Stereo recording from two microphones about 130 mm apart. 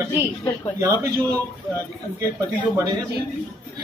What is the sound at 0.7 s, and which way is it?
Speech, 25° right (ahead or behind).